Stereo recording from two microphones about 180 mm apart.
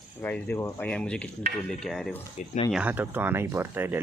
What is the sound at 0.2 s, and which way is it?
Speech, 10° left (ahead or behind).